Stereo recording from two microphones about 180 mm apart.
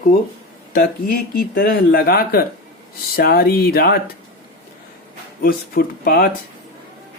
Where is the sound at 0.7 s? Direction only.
55° left (ahead or behind).